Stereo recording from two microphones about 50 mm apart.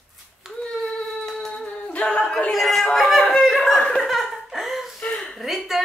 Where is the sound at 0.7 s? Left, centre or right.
Centre.